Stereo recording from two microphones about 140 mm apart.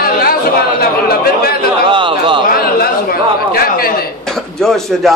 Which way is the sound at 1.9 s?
35° right (ahead or behind).